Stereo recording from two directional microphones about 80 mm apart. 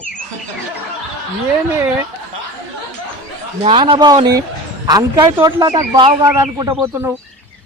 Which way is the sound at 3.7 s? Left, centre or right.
Right.